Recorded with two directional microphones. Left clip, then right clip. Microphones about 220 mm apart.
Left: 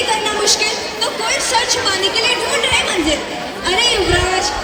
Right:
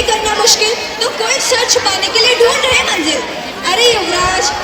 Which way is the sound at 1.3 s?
35° right (ahead or behind).